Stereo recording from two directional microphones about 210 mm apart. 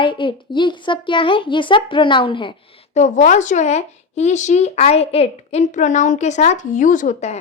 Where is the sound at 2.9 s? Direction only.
35° left (ahead or behind).